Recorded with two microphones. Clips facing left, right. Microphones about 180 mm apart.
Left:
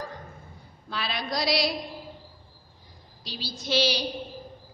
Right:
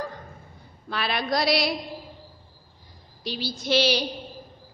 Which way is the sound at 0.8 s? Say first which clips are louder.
Right 5 dB; 60° right (ahead or behind).